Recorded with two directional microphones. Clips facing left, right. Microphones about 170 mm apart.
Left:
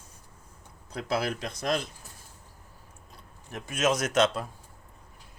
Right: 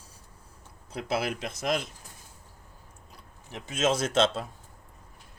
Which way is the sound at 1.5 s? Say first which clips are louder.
Even; 5° right (ahead or behind).